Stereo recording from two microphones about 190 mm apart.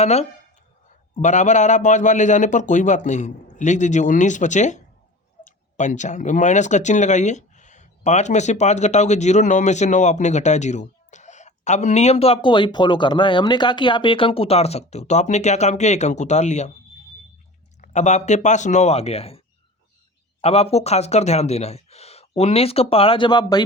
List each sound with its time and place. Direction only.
0.0 s speech: 35° left (ahead or behind)
17.7 s speech: 40° left (ahead or behind)
20.4 s speech: 30° left (ahead or behind)